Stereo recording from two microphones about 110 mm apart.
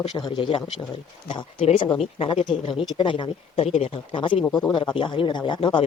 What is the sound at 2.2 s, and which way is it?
Speech, 50° left (ahead or behind).